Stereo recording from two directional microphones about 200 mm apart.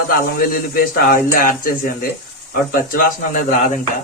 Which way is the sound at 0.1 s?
45° left (ahead or behind).